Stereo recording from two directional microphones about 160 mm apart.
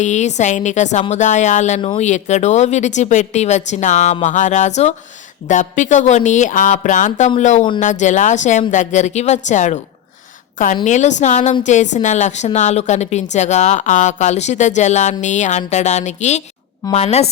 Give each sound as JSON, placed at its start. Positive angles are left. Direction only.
{"t": 0.0, "sound": "a woman's voice", "side_deg": 45}
{"t": 10.8, "sound": "a woman's voice", "side_deg": 45}